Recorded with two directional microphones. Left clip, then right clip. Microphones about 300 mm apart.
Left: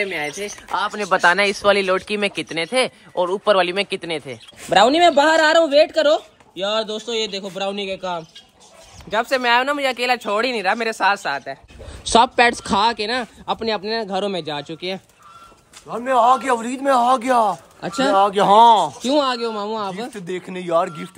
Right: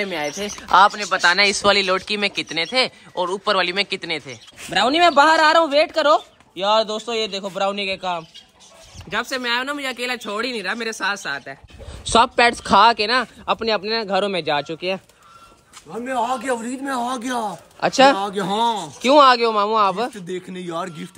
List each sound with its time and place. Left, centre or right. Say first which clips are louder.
0.0 s speech: left 1 dB; centre
0.9 s speech: left 1 dB; centre
17.7 s speech: right 7 dB; centre
18.0 s speech: left 2 dB; centre